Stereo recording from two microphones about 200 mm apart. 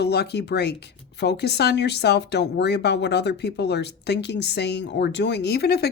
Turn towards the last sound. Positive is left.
turn(degrees=55)  # may be behind; listen again after turning